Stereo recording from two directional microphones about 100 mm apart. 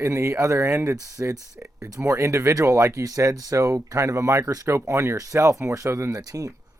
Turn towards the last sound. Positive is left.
turn(degrees=-35)  # may be behind; listen again after turning